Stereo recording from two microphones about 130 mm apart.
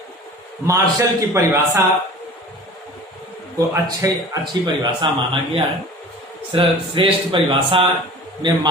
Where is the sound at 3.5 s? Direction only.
25° right (ahead or behind).